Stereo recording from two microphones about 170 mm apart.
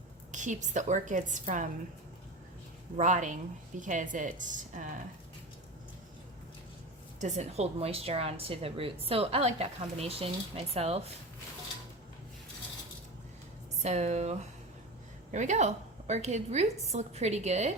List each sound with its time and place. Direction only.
0.3 s a woman's voice: 45° right (ahead or behind)
3.0 s a woman's voice: 45° right (ahead or behind)
7.2 s a woman's voice: 40° right (ahead or behind)
13.8 s a woman's voice: 40° right (ahead or behind)